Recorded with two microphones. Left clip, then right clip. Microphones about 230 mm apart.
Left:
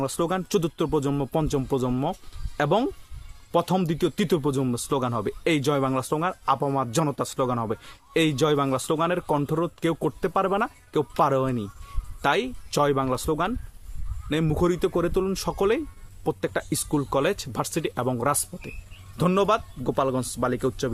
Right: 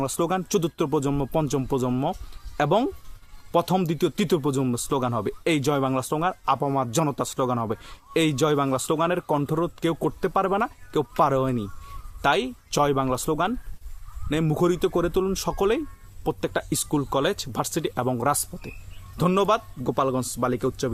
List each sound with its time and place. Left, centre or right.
0.0 s speech: centre